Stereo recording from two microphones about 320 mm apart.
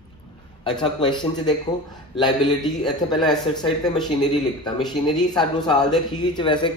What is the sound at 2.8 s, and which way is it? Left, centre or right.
Speech, centre.